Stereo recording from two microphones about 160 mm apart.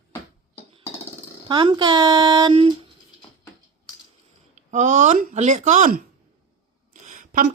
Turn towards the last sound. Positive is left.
turn(degrees=-55)  # may be behind; listen again after turning